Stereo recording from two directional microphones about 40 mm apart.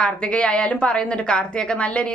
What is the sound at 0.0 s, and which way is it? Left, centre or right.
Speech, left.